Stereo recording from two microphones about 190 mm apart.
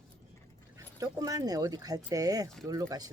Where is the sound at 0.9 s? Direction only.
20° right (ahead or behind).